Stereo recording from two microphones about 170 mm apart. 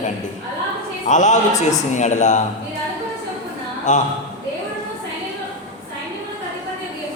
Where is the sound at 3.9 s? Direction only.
45° left (ahead or behind).